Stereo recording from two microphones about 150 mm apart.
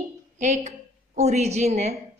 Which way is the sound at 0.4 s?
50° right (ahead or behind).